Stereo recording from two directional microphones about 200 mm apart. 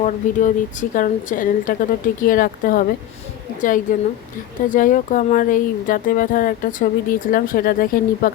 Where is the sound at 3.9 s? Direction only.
45° left (ahead or behind).